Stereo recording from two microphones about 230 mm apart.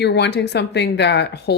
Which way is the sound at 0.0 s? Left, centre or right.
Left.